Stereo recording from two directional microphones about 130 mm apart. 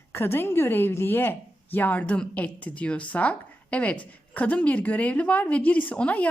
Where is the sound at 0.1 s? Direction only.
15° left (ahead or behind).